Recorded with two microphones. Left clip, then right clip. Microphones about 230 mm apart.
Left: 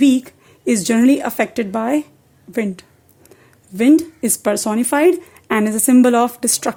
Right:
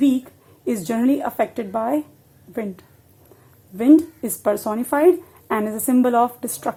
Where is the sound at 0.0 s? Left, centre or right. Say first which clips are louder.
Left 5 dB; left.